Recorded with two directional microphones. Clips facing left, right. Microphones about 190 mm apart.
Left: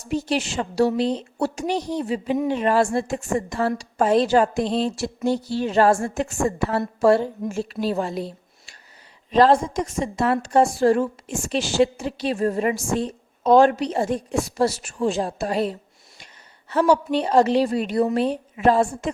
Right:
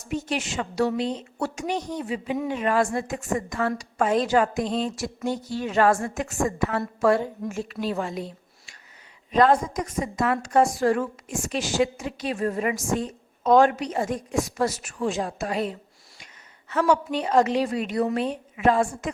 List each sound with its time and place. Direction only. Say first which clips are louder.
0.0 s a woman's voice: left 4 dB; 35° left (ahead or behind)